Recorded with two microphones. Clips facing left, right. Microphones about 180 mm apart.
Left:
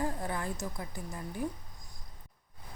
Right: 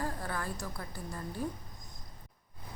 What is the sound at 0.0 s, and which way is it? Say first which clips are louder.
A woman's voice: left 2 dB; 20° left (ahead or behind).